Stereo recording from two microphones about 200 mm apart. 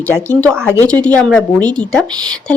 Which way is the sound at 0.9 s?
5° left (ahead or behind).